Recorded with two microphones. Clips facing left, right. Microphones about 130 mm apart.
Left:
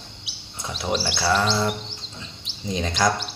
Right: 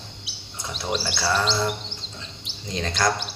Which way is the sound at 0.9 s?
5° left (ahead or behind).